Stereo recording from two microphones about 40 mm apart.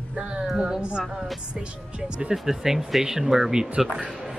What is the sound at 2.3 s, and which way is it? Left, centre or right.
Speech, centre.